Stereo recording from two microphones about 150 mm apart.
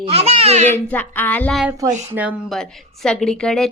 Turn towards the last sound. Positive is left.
turn(degrees=5)  # may be behind; listen again after turning